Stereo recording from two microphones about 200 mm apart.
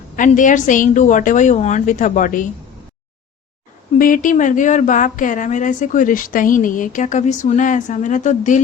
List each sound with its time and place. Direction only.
0.2 s speech: 40° left (ahead or behind)
3.9 s speech: 45° left (ahead or behind)